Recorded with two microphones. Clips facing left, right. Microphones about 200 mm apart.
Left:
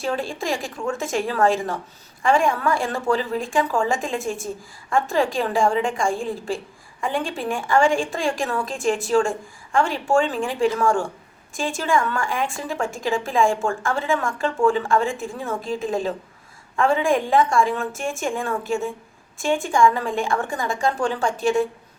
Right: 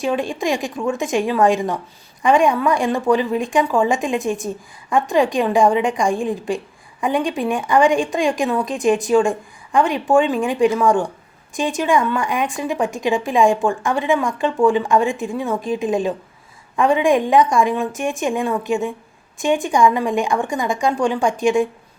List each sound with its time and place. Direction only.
0.0 s a woman's voice: 15° right (ahead or behind)